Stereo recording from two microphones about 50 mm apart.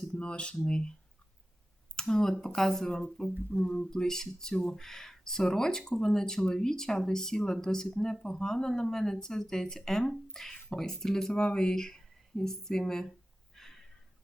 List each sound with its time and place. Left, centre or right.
0.2 s speech: left
2.0 s speech: centre
13.6 s a sound: centre